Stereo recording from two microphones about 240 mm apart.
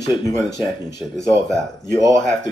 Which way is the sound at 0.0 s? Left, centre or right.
Centre.